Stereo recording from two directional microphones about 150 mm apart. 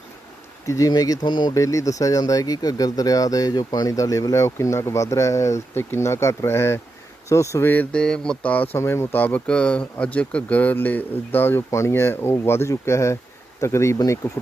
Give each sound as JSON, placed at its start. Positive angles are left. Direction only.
{"t": 0.7, "sound": "speech", "side_deg": 25}